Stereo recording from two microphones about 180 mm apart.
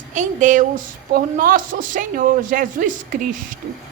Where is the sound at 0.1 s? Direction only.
45° right (ahead or behind).